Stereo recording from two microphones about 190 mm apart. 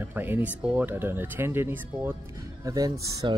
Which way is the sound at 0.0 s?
10° right (ahead or behind).